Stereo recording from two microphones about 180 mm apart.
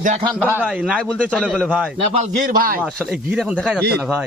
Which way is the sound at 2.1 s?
45° right (ahead or behind).